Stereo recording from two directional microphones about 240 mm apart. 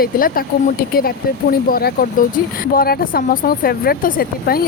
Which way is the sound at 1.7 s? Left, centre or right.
Left.